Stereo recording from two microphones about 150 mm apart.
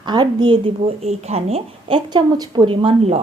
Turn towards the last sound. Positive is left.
turn(degrees=-40)  # may be behind; listen again after turning